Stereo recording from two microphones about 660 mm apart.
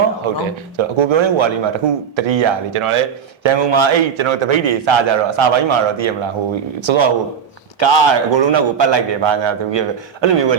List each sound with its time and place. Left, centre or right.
0.2 s a man's voice: right